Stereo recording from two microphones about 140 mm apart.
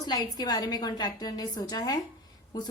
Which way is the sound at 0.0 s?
30° left (ahead or behind).